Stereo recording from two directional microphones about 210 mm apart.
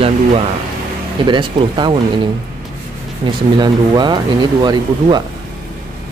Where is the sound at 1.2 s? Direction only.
20° right (ahead or behind).